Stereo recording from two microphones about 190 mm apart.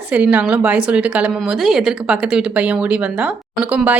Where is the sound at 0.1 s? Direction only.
5° right (ahead or behind).